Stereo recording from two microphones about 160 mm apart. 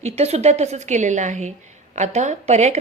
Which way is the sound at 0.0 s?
40° right (ahead or behind).